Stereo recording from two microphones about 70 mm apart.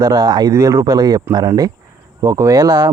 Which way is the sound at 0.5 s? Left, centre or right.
Right.